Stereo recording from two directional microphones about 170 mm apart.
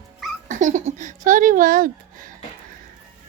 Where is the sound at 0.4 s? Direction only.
45° right (ahead or behind).